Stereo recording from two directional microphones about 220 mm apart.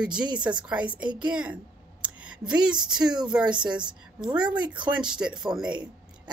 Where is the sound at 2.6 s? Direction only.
5° right (ahead or behind).